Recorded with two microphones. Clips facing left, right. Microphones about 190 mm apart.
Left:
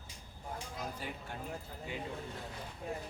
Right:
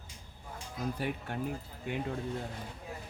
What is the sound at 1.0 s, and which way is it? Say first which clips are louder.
Speech: right 8 dB; 65° right (ahead or behind).